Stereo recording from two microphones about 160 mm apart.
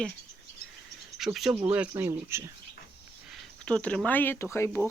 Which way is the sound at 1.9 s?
15° right (ahead or behind).